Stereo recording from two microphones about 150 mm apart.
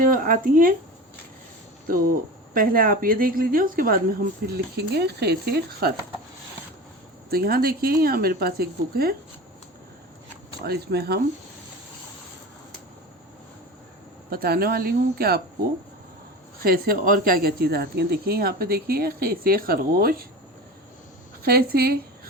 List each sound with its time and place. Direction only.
0.0 s speech: 65° right (ahead or behind)
2.5 s a woman's voice: 70° right (ahead or behind); by 5.9 s 90° right
7.3 s speech: 90° right
10.6 s speech: 90° right
14.3 s speech: 85° right
16.6 s speech: 85° right
21.4 s speech: 90° right